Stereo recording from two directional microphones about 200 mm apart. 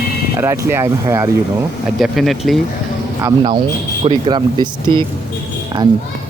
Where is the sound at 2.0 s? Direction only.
Centre (ahead or behind).